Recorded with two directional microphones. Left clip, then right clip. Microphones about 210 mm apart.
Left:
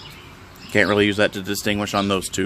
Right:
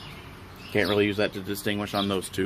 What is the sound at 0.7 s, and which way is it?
Speech, 40° left (ahead or behind).